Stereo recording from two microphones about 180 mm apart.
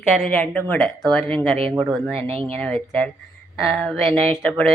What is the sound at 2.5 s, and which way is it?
A woman's voice, 10° left (ahead or behind).